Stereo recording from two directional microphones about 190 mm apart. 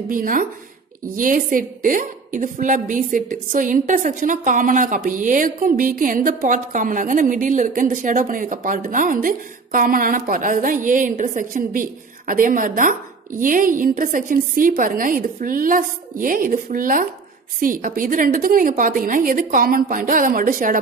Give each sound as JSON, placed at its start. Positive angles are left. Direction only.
{"t": 0.1, "sound": "a woman's voice", "side_deg": -45}